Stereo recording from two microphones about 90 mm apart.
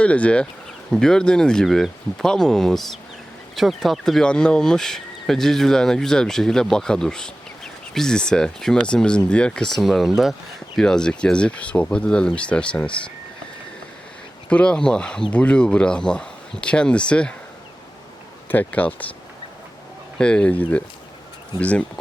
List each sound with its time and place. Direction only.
0.0 s speech: 15° left (ahead or behind)
14.5 s speech: 10° left (ahead or behind)
18.4 s speech: 20° left (ahead or behind)
20.1 s speech: 10° left (ahead or behind)